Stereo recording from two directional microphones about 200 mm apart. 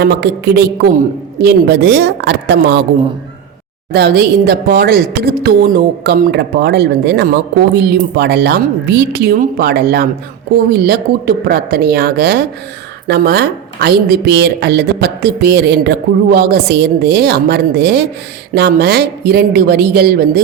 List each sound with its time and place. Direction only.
0.0 s a woman's voice: 55° right (ahead or behind)
3.9 s speech: 55° right (ahead or behind)